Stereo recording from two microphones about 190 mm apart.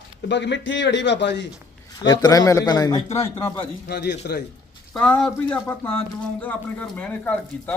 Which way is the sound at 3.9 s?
60° left (ahead or behind).